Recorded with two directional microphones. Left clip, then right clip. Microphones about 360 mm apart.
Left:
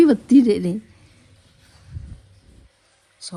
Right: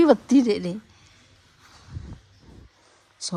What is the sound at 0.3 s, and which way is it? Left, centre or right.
Speech, centre.